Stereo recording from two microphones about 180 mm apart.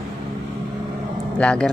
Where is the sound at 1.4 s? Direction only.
5° left (ahead or behind).